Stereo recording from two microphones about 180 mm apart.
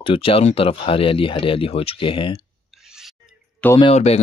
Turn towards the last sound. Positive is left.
turn(degrees=35)  # may be behind; listen again after turning